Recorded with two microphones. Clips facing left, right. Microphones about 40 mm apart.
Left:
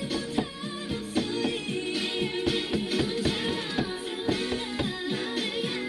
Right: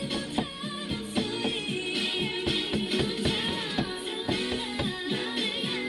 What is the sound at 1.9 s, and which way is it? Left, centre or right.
Music, centre.